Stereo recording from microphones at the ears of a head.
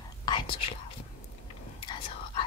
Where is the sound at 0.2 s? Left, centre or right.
Left.